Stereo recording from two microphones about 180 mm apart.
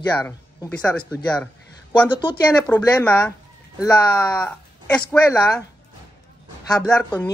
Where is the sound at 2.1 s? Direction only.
25° left (ahead or behind).